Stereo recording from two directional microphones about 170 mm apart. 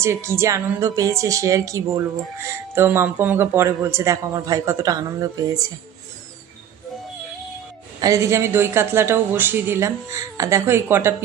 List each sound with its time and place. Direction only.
0.0 s speech: 15° right (ahead or behind)
8.0 s speech: 20° right (ahead or behind)